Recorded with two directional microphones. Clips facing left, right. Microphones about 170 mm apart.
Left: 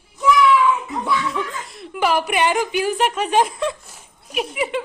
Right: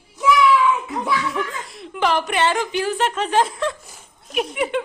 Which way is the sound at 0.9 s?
Centre (ahead or behind).